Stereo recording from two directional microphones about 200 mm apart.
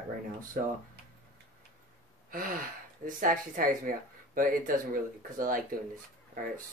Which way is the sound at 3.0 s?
45° right (ahead or behind).